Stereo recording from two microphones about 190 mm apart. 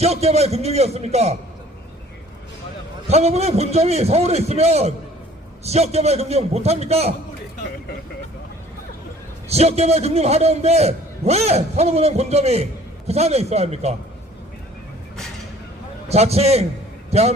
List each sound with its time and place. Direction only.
0.0 s a man's voice: 35° right (ahead or behind)
3.1 s a man's voice: 35° right (ahead or behind)
9.5 s a man's voice: 35° right (ahead or behind)
16.0 s a man's voice: 35° right (ahead or behind)